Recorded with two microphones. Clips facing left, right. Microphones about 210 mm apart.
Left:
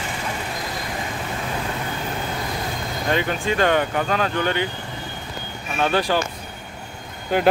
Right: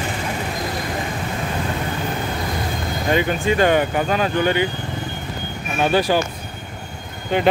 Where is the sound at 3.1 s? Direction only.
5° right (ahead or behind).